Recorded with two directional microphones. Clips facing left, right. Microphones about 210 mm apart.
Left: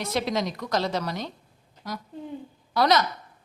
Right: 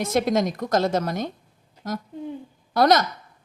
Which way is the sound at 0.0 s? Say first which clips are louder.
Right 5 dB; 50° right (ahead or behind).